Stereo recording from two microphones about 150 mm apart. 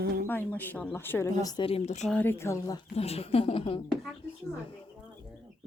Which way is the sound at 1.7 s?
45° left (ahead or behind).